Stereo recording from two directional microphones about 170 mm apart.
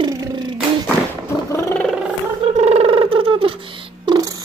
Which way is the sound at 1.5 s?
15° left (ahead or behind).